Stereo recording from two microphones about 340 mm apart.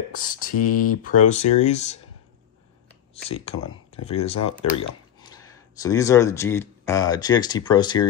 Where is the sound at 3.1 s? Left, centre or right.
Centre.